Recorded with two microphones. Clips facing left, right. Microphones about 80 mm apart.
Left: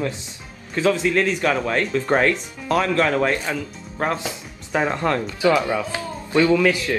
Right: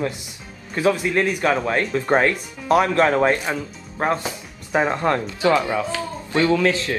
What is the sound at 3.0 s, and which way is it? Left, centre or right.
Speech, right.